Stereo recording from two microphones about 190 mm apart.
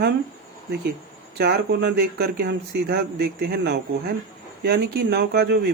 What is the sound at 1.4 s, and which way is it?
Speech, 60° right (ahead or behind).